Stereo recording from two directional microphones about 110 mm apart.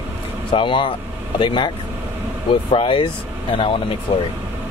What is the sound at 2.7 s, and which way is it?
Speech, 50° left (ahead or behind).